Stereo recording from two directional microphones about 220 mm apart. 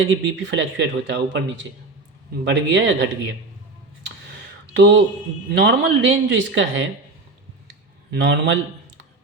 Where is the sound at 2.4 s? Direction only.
55° right (ahead or behind).